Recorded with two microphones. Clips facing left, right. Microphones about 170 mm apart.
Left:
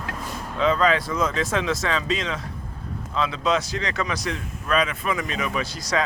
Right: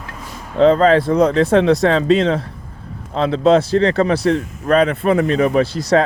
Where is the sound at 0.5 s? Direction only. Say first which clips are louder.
Right 9 dB; 60° right (ahead or behind).